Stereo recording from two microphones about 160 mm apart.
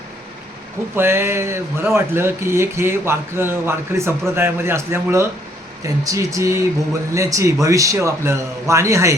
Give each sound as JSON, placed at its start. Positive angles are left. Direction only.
{"t": 0.9, "sound": "a man's voice", "side_deg": -15}